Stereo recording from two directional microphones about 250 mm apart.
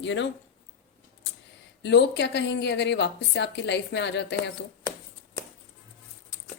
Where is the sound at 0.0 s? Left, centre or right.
Left.